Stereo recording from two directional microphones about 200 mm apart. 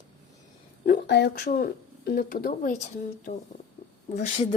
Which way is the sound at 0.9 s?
60° left (ahead or behind).